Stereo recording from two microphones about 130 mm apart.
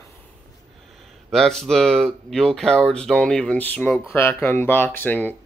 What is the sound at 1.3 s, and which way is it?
Speech, 5° left (ahead or behind).